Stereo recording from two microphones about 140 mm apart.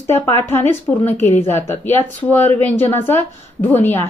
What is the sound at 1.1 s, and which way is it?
Speech, 50° left (ahead or behind).